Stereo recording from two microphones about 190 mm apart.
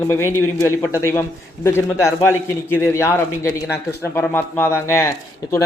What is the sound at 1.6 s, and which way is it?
A man's voice, 15° left (ahead or behind).